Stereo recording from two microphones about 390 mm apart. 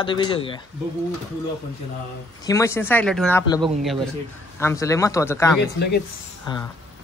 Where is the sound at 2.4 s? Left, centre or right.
Centre.